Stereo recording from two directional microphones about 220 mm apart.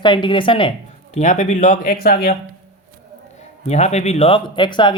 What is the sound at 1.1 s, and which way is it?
Speech, 35° left (ahead or behind).